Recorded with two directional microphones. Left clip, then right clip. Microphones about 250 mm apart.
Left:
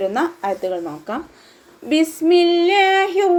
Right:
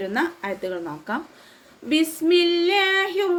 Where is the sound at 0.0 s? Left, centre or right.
Centre.